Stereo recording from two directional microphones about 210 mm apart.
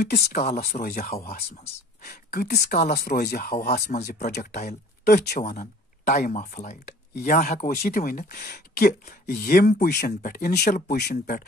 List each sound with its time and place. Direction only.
0.0 s speech: 50° left (ahead or behind)